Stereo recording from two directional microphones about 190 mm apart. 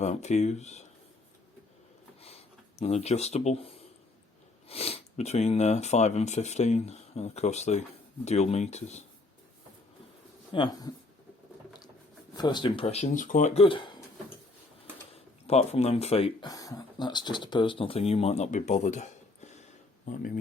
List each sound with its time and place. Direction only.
0.0 s speech: 35° left (ahead or behind)
2.2 s a sound: 35° left (ahead or behind)
4.7 s speech: 30° left (ahead or behind)
10.5 s speech: 20° left (ahead or behind)
12.4 s speech: 25° left (ahead or behind)
15.1 s speech: 35° left (ahead or behind)
16.5 s speech: 20° left (ahead or behind); by 20.4 s 45° left (ahead or behind)